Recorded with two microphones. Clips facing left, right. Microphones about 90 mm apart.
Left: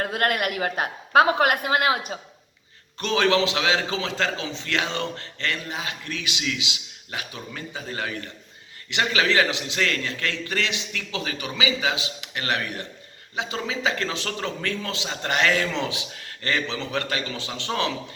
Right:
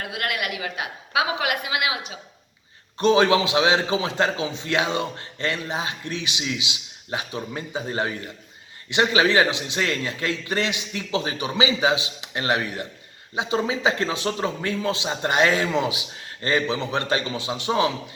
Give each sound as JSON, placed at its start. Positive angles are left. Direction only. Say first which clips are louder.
{"t": 0.0, "sound": "a woman's voice", "louder": "left 4 dB", "side_deg": 45}
{"t": 3.0, "sound": "a man's voice", "louder": "right 4 dB", "side_deg": -20}